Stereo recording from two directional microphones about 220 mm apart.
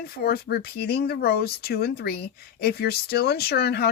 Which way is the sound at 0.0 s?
45° left (ahead or behind).